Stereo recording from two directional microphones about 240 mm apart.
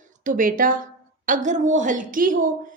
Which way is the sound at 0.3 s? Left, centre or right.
Right.